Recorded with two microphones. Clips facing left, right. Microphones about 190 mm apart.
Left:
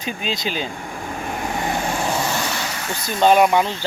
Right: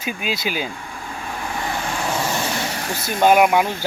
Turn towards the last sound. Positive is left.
turn(degrees=-10)  # may be behind; listen again after turning